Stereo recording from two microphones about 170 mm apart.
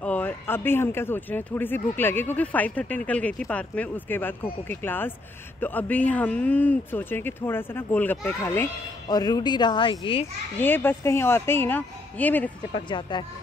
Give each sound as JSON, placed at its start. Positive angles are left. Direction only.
{"t": 0.0, "sound": "a man's voice", "side_deg": 10}
{"t": 9.1, "sound": "speech", "side_deg": 25}
{"t": 10.6, "sound": "a man's voice", "side_deg": 10}
{"t": 12.7, "sound": "speech", "side_deg": 25}